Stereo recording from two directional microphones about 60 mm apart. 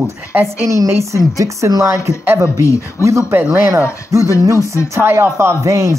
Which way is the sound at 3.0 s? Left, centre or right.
Right.